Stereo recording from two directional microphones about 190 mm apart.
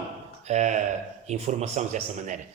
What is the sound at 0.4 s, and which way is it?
A man's voice, 35° right (ahead or behind).